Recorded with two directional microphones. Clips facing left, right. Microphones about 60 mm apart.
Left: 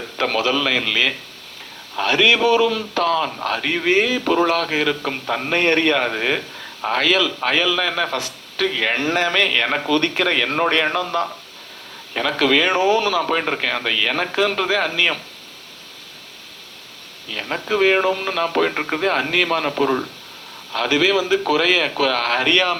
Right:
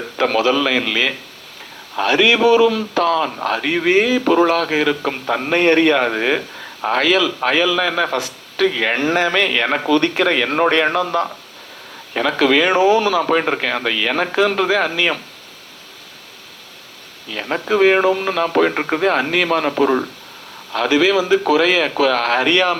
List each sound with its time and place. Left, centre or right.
0.2 s a man's voice: right
17.3 s a man's voice: right